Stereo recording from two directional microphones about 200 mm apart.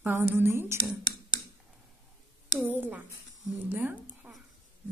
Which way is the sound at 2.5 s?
10° right (ahead or behind).